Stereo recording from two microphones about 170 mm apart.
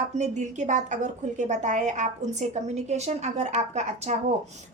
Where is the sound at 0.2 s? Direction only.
45° right (ahead or behind).